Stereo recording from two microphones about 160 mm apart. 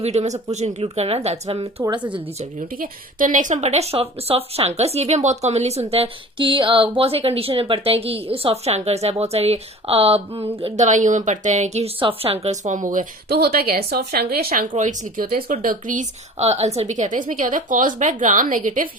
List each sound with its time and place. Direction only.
0.0 s a woman's voice: 45° right (ahead or behind)
2.7 s a woman's voice: 60° right (ahead or behind)
14.8 s a woman's voice: 55° right (ahead or behind)